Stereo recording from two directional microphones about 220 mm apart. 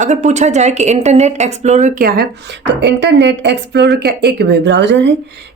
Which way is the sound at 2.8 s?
55° right (ahead or behind).